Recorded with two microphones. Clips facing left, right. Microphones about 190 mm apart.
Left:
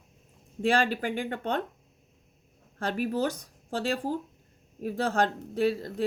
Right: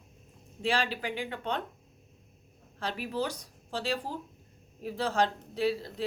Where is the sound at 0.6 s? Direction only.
50° left (ahead or behind).